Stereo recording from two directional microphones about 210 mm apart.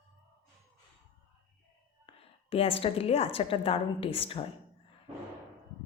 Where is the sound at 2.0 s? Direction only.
25° left (ahead or behind).